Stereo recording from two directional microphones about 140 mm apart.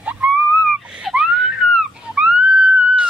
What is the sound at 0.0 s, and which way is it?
Wheeze, 10° right (ahead or behind).